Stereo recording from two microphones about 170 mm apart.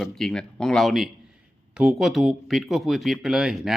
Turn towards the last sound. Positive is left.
turn(degrees=-5)  # may be behind; listen again after turning